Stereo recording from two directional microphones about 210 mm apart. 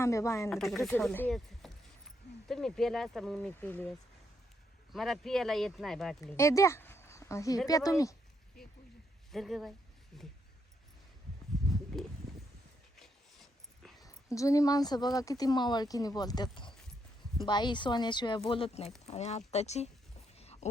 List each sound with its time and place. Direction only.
0.0 s speech: 15° left (ahead or behind)
0.5 s speech: centre (ahead or behind)
6.3 s speech: 15° left (ahead or behind)
8.6 s a sound: centre (ahead or behind)
9.3 s speech: centre (ahead or behind)
11.5 s a sound: centre (ahead or behind)
13.0 s dog: centre (ahead or behind)
14.0 s speech: 15° left (ahead or behind); by 19.9 s 30° left (ahead or behind)
20.3 s a sound: 30° left (ahead or behind)